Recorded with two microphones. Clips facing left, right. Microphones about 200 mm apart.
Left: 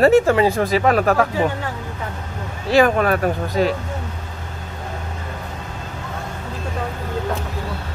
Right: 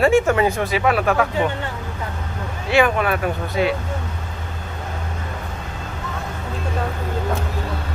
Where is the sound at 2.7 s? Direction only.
40° left (ahead or behind).